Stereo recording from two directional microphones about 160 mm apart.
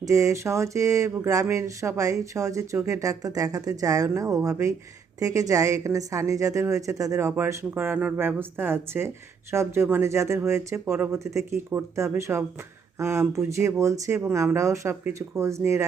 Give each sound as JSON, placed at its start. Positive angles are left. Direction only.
{"t": 0.0, "sound": "a woman's voice", "side_deg": -20}